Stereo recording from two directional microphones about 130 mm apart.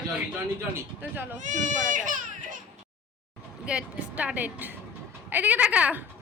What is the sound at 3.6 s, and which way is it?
A woman's voice, 10° right (ahead or behind).